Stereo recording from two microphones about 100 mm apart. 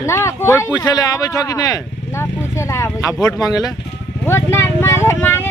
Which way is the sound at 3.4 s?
40° left (ahead or behind).